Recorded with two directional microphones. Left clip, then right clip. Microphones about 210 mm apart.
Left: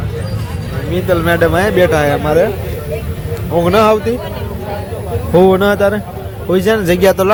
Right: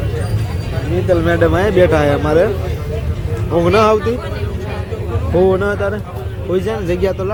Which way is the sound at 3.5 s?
Centre (ahead or behind).